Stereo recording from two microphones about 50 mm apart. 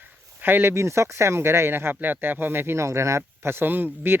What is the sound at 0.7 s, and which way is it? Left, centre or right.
Speech, right.